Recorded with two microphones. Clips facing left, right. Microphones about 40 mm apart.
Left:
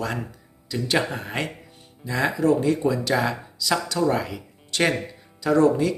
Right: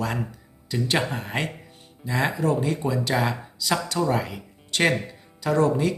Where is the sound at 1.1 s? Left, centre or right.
Right.